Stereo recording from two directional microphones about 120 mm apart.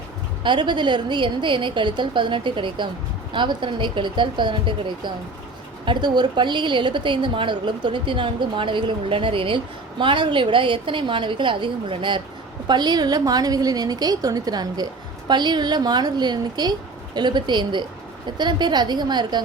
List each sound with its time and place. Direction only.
0.4 s a woman's voice: 40° right (ahead or behind)